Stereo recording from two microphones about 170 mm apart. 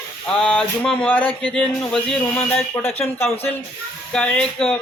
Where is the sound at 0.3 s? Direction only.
5° left (ahead or behind).